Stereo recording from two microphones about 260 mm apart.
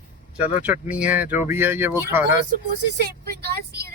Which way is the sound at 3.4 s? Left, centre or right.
Right.